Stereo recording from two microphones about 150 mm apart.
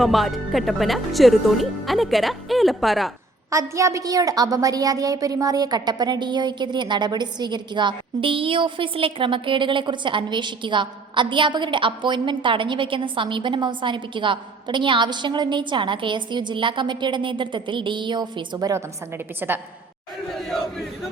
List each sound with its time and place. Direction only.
0.0 s speech: centre (ahead or behind)
3.5 s a woman's voice: 20° right (ahead or behind)
20.3 s battle cry: centre (ahead or behind)